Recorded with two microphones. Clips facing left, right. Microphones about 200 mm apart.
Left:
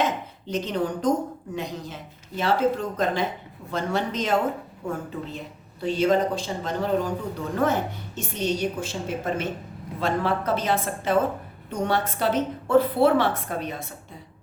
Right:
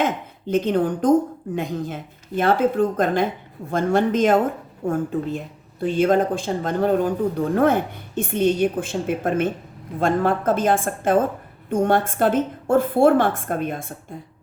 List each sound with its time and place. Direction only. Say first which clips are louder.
0.0 s speech: right 3 dB; 55° right (ahead or behind)